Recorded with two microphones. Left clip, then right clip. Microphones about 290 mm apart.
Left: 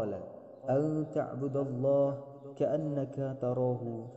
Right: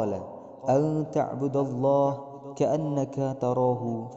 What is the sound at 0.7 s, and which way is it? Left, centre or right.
Mantra, right.